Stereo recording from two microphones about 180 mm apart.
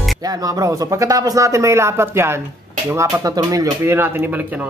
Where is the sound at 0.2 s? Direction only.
20° right (ahead or behind).